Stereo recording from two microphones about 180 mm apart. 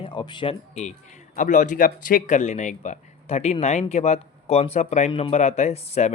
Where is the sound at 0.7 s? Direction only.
40° left (ahead or behind).